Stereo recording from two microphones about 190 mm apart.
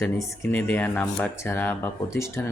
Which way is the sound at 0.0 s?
5° left (ahead or behind).